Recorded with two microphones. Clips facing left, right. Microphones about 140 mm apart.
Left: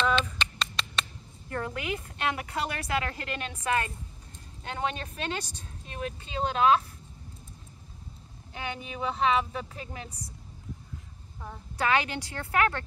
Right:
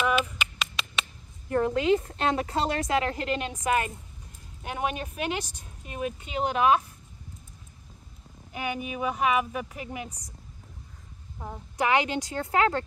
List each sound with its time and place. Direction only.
0.0 s a sound: 10° right (ahead or behind)
1.5 s a woman's voice: 25° right (ahead or behind)
8.5 s speech: 15° right (ahead or behind)
11.3 s a woman's voice: 20° right (ahead or behind)